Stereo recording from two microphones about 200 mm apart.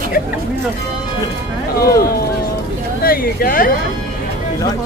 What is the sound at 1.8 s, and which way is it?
Speech, 50° left (ahead or behind).